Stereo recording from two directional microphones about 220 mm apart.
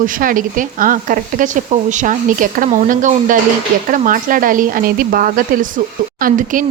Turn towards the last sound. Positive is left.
turn(degrees=-40)  # may be behind; listen again after turning